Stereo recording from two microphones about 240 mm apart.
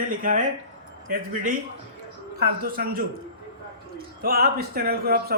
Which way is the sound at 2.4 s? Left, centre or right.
Right.